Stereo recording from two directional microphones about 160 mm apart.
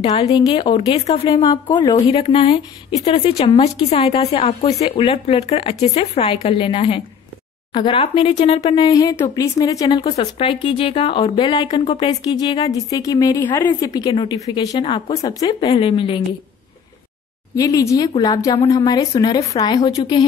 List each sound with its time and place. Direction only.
0.0 s speech: 30° left (ahead or behind)
2.0 s speech: 40° left (ahead or behind)
8.8 s speech: 25° left (ahead or behind)
17.6 s speech: 20° left (ahead or behind)